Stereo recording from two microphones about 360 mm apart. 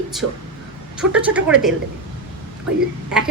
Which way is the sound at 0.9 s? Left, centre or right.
Centre.